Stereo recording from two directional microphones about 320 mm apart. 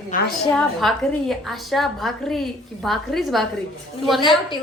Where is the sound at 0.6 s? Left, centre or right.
Centre.